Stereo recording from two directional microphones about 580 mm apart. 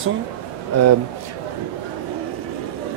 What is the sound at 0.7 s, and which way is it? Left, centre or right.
Speech, right.